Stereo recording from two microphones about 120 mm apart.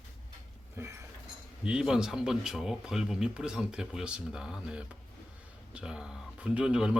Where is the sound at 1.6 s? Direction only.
5° right (ahead or behind).